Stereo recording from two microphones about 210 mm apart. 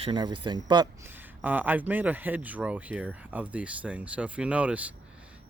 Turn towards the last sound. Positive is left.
turn(degrees=-5)  # may be behind; listen again after turning